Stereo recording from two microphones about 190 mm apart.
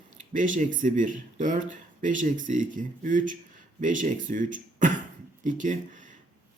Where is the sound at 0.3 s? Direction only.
40° right (ahead or behind).